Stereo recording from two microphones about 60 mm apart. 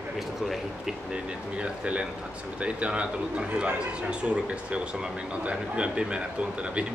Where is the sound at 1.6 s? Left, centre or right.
Centre.